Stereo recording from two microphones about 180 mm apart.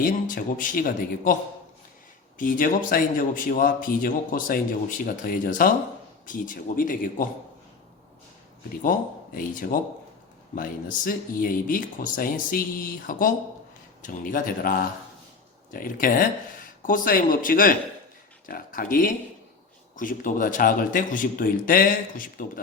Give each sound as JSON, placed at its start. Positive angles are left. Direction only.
{"t": 0.0, "sound": "a man's voice", "side_deg": 50}
{"t": 2.4, "sound": "a man's voice", "side_deg": 50}
{"t": 8.8, "sound": "a man's voice", "side_deg": 50}